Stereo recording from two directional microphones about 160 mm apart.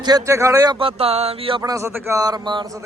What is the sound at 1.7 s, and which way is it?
Speech, 15° right (ahead or behind).